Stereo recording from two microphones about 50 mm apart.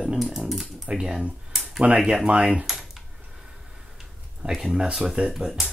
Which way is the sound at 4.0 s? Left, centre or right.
Centre.